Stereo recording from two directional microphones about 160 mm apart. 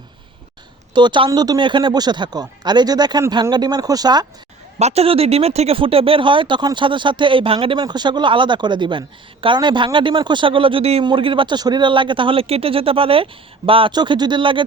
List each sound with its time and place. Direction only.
0.9 s speech: 30° right (ahead or behind)
4.8 s speech: 40° right (ahead or behind)